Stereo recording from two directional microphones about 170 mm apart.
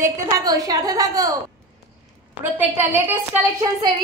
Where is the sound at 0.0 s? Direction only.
20° right (ahead or behind).